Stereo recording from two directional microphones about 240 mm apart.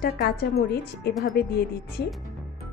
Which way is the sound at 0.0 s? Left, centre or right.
Left.